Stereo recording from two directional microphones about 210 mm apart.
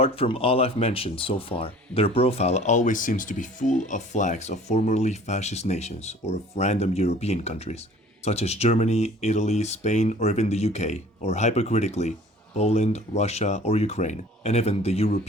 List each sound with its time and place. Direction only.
0.0 s speech: 25° left (ahead or behind)